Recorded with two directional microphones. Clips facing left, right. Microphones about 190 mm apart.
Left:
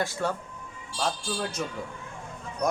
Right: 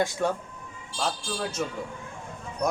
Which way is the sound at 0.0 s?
15° right (ahead or behind).